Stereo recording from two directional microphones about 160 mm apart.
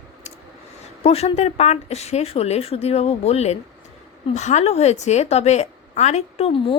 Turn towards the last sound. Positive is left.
turn(degrees=35)  # may be behind; listen again after turning